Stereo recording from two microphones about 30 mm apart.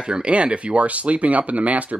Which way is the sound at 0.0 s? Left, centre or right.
Right.